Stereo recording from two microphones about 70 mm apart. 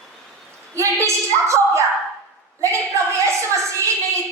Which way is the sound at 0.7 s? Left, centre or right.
Right.